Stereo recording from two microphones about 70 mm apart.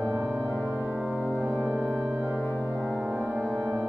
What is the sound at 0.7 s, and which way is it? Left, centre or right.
Organ, centre.